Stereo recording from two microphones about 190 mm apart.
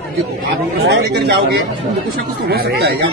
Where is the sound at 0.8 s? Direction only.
60° right (ahead or behind).